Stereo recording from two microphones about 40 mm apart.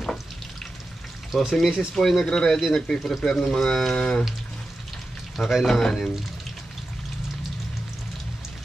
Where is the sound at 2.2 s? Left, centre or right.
Centre.